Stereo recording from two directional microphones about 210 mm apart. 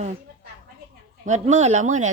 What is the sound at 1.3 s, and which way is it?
Speech, 35° right (ahead or behind).